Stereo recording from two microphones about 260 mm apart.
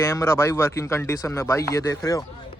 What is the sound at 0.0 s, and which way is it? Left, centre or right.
A man's voice, centre.